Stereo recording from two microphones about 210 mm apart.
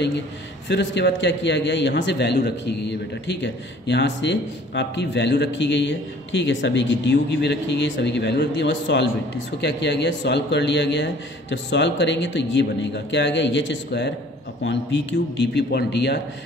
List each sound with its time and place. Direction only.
0.7 s a man's voice: 55° left (ahead or behind)